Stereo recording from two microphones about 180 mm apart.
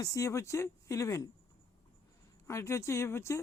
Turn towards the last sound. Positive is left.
turn(degrees=15)  # may be behind; listen again after turning